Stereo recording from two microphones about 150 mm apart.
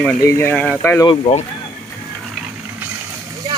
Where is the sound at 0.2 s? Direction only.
15° left (ahead or behind).